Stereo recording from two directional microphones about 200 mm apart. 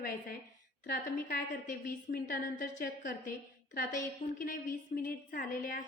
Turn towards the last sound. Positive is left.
turn(degrees=45)  # may be behind; listen again after turning